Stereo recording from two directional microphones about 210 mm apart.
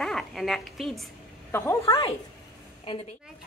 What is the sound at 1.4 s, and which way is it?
Speech, 10° left (ahead or behind).